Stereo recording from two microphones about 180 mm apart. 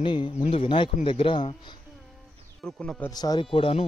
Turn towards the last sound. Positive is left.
turn(degrees=30)  # may be behind; listen again after turning